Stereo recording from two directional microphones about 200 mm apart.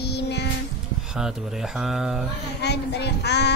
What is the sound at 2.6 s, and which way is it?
Child singing, 55° left (ahead or behind).